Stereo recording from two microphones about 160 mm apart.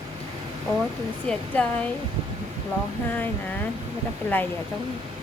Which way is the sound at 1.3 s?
5° left (ahead or behind).